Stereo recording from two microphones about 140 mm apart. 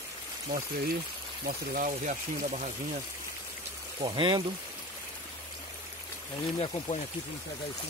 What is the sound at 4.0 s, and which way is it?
Speech, 35° right (ahead or behind).